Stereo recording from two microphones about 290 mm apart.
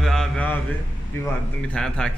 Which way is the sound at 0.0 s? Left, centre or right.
Centre.